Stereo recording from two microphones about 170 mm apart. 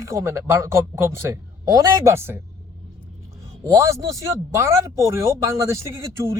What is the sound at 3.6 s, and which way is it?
Speech, 15° right (ahead or behind).